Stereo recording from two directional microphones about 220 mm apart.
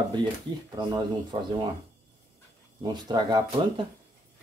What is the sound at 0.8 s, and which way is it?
Speech, 20° right (ahead or behind).